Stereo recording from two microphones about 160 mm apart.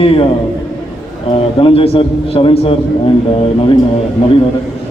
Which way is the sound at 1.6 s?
35° left (ahead or behind).